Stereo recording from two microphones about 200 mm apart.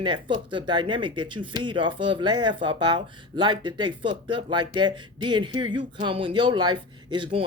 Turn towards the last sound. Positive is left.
turn(degrees=-25)  # may be behind; listen again after turning